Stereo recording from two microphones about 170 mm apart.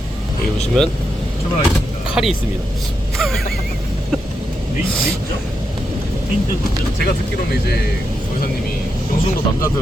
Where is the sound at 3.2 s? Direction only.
Centre (ahead or behind).